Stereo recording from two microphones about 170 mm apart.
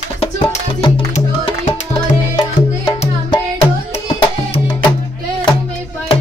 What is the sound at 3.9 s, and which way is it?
Music, 35° left (ahead or behind).